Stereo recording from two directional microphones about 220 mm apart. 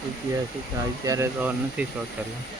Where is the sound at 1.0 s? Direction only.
10° right (ahead or behind).